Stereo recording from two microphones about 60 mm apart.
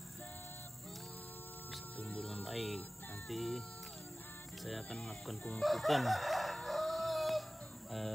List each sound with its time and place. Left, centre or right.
2.0 s speech: left
2.2 s speech: centre
4.8 s speech: centre
5.6 s chicken: centre